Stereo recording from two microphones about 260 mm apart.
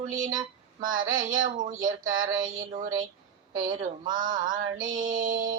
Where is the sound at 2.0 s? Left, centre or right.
Right.